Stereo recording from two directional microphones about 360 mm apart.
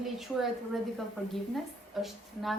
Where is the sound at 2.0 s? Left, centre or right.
Centre.